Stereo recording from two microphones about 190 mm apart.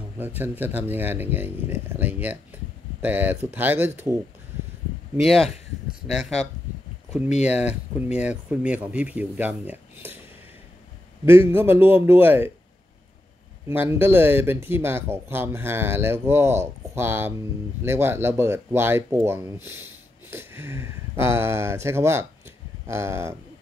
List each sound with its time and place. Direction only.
0.2 s speech: 10° right (ahead or behind)
5.1 s speech: centre (ahead or behind)
7.2 s speech: 35° left (ahead or behind)
7.6 s speech: 5° right (ahead or behind)
11.2 s speech: 10° right (ahead or behind)
13.7 s speech: 10° right (ahead or behind)